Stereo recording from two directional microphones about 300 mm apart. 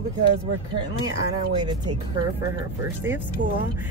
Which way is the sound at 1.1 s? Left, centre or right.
Centre.